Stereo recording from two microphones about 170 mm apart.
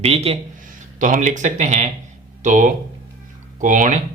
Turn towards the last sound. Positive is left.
turn(degrees=-50)  # may be behind; listen again after turning